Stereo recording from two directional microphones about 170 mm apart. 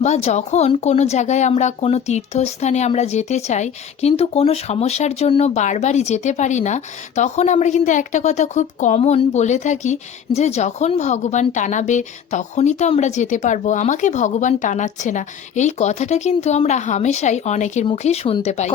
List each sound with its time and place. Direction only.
0.0 s speech: 40° left (ahead or behind)